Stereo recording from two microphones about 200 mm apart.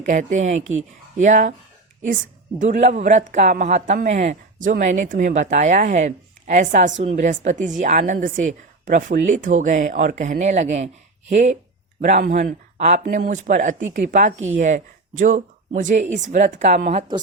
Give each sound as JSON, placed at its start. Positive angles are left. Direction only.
{"t": 0.0, "sound": "speech", "side_deg": -40}
{"t": 2.6, "sound": "speech", "side_deg": -35}
{"t": 12.0, "sound": "speech", "side_deg": -40}